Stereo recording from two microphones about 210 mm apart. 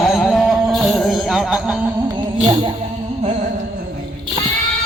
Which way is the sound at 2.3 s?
25° right (ahead or behind).